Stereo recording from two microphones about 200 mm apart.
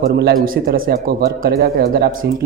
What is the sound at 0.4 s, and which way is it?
Speech, 45° right (ahead or behind).